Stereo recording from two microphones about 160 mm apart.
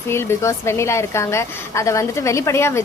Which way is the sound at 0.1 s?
15° left (ahead or behind).